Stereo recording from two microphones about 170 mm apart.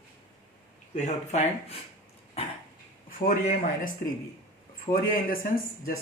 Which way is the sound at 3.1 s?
55° left (ahead or behind).